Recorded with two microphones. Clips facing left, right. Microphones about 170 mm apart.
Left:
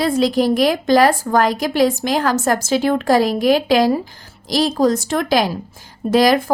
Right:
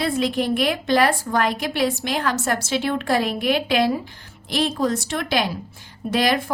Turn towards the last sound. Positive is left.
turn(degrees=40)  # may be behind; listen again after turning